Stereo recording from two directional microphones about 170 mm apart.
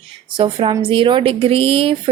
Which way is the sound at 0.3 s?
30° right (ahead or behind).